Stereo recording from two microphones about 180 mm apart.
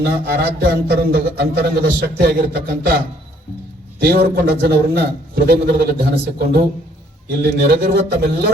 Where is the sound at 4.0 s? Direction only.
60° right (ahead or behind).